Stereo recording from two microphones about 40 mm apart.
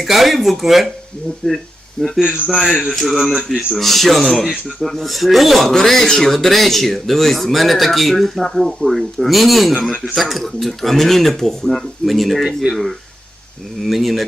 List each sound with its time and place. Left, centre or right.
0.0 s speech: centre
1.4 s speech: left
2.0 s speech: centre
2.9 s speech: centre
3.3 s speech: centre
3.8 s speech: centre
13.8 s speech: centre